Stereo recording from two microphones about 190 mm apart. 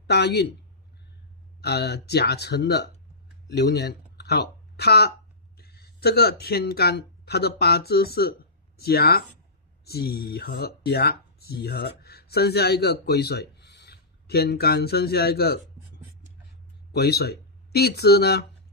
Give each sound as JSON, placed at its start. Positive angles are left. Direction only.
{"t": 0.0, "sound": "speech", "side_deg": 60}
{"t": 1.6, "sound": "speech", "side_deg": 60}
{"t": 16.9, "sound": "speech", "side_deg": 55}